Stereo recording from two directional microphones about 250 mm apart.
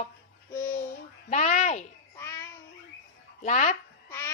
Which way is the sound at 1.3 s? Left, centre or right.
Left.